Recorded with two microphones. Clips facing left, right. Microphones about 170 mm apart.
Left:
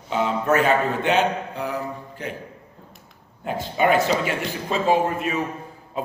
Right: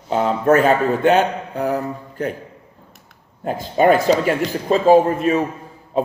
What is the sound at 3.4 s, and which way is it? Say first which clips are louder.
A man's voice: right 6 dB; 40° right (ahead or behind).